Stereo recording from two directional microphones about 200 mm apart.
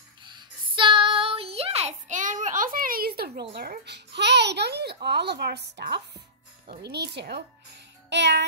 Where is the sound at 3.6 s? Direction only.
55° right (ahead or behind).